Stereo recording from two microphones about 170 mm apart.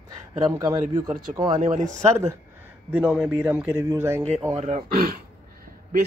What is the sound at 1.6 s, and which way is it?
Speech, 50° right (ahead or behind).